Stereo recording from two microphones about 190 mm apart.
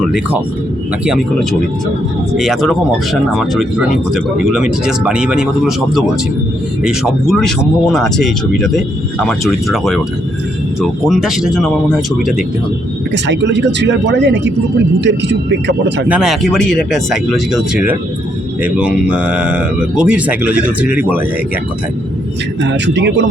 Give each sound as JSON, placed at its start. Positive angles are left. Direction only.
{"t": 2.3, "sound": "speech", "side_deg": 0}
{"t": 13.2, "sound": "speech", "side_deg": -70}
{"t": 16.0, "sound": "speech", "side_deg": -5}
{"t": 22.6, "sound": "speech", "side_deg": -65}